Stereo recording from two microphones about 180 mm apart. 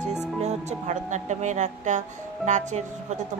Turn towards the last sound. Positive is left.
turn(degrees=-40)  # may be behind; listen again after turning